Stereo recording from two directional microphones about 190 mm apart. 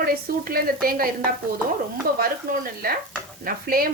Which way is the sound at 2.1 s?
50° right (ahead or behind).